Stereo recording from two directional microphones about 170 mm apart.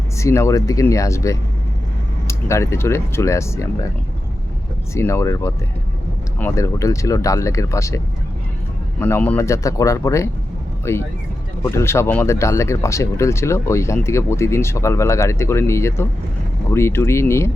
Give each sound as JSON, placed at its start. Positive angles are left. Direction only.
{"t": 0.2, "sound": "speech", "side_deg": 15}
{"t": 4.9, "sound": "speech", "side_deg": 15}